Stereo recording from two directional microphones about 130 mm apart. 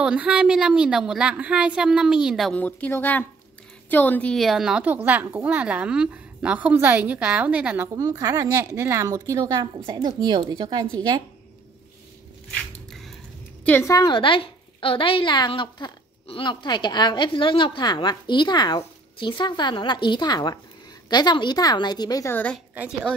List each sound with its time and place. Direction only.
0.0 s a woman's voice: 10° right (ahead or behind)
2.5 s a woman's voice: 10° left (ahead or behind); by 7.9 s 15° right (ahead or behind)
7.9 s a woman's voice: 30° right (ahead or behind)
12.5 s squish: centre (ahead or behind)
13.7 s speech: 15° left (ahead or behind)
13.9 s a woman's voice: 35° left (ahead or behind)
22.3 s speech: 10° left (ahead or behind)